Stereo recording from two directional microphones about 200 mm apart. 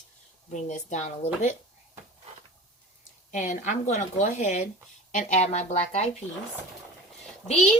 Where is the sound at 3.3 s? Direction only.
35° left (ahead or behind).